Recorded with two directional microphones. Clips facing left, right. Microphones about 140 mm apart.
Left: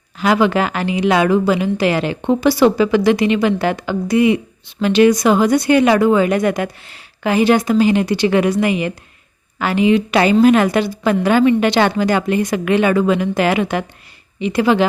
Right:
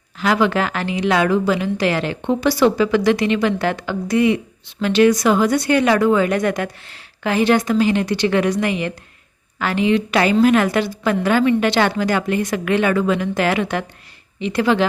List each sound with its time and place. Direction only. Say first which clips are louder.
0.2 s a woman's voice: left 3 dB; 15° left (ahead or behind)
10.2 s a woman's voice: left 3 dB; 20° left (ahead or behind)